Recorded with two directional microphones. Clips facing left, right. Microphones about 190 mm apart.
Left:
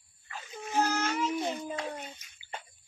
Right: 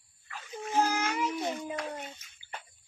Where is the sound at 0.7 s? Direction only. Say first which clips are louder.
Even; 10° right (ahead or behind).